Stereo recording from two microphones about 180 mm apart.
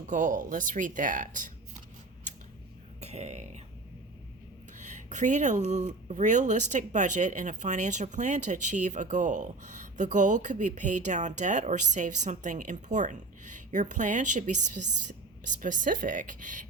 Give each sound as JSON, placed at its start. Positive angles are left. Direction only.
{"t": 0.1, "sound": "speech", "side_deg": -45}
{"t": 3.0, "sound": "music", "side_deg": -35}
{"t": 4.8, "sound": "speech", "side_deg": -40}